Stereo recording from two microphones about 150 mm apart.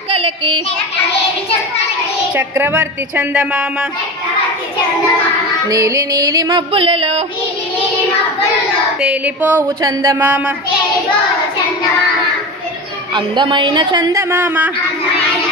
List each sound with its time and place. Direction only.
0.1 s a sound: 35° right (ahead or behind)
2.3 s a woman's voice: 10° right (ahead or behind)
5.7 s music: 20° right (ahead or behind)
6.7 s a woman's voice: 40° right (ahead or behind)
9.0 s a woman's voice: 10° right (ahead or behind)
9.8 s music: 25° right (ahead or behind)
10.1 s a woman's voice: 10° right (ahead or behind)
13.1 s a woman's voice: 30° right (ahead or behind)
14.3 s a woman's voice: 10° right (ahead or behind)